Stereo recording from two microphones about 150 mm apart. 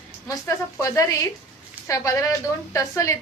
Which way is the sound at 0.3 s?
20° left (ahead or behind).